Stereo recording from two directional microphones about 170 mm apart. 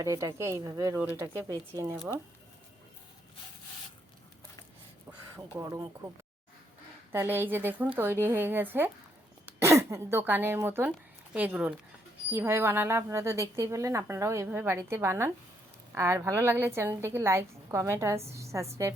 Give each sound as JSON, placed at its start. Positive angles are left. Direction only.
{"t": 0.0, "sound": "speech", "side_deg": -20}
{"t": 5.5, "sound": "a woman's voice", "side_deg": -15}
{"t": 7.1, "sound": "a woman's voice", "side_deg": -15}